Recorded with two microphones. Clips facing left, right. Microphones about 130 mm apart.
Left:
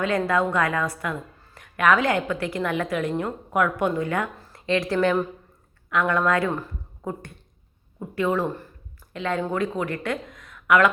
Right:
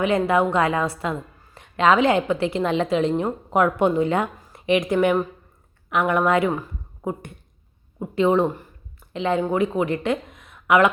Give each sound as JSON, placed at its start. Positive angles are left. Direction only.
{"t": 0.0, "sound": "a woman's voice", "side_deg": -20}